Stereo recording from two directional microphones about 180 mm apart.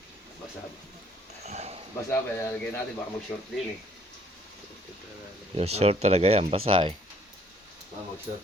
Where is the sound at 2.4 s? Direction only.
15° left (ahead or behind).